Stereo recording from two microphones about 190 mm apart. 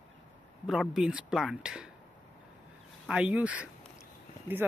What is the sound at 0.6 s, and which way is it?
Speech, centre (ahead or behind).